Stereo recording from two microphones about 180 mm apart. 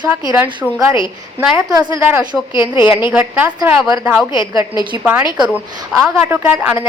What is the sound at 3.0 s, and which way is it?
Speech, 10° right (ahead or behind).